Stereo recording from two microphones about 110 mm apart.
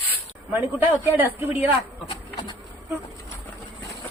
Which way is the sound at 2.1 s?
45° left (ahead or behind).